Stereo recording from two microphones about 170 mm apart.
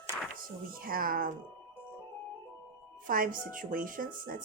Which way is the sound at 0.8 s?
60° right (ahead or behind).